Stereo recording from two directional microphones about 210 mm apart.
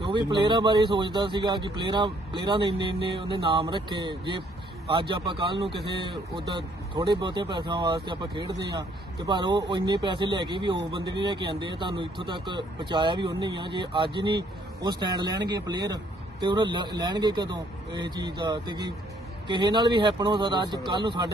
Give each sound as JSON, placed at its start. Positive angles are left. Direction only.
{"t": 0.1, "sound": "speech", "side_deg": -20}